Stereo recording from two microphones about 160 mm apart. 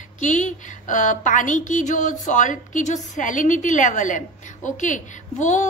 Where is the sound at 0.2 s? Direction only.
50° left (ahead or behind).